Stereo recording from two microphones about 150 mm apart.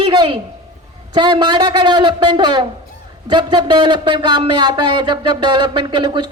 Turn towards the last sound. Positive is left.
turn(degrees=-30)  # may be behind; listen again after turning